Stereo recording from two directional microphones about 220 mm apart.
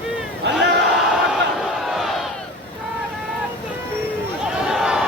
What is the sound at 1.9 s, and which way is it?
Crowd, centre (ahead or behind).